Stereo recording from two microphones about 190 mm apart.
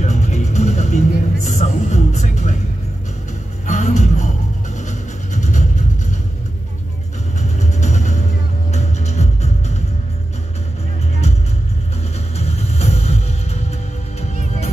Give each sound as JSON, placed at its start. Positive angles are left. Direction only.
{"t": 0.0, "sound": "music", "side_deg": 35}
{"t": 3.6, "sound": "music", "side_deg": 40}
{"t": 7.5, "sound": "music", "side_deg": 40}
{"t": 12.4, "sound": "music", "side_deg": 35}